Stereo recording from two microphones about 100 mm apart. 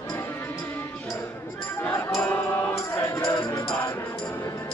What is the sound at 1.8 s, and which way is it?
Music, 25° left (ahead or behind).